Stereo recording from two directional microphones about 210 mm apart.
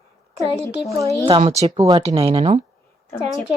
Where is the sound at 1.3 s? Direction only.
25° right (ahead or behind).